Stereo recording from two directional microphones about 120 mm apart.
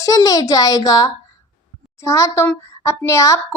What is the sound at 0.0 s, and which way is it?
A woman's voice, 30° left (ahead or behind).